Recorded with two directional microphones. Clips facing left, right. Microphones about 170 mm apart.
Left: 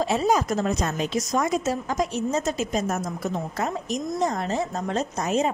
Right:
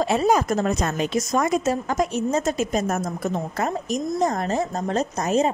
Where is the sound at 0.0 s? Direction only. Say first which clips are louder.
Right 2 dB; 60° right (ahead or behind).